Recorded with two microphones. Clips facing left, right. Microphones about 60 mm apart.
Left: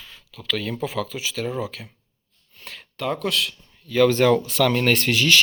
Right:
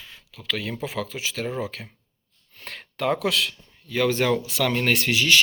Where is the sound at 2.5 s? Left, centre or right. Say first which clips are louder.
Right 2 dB; right.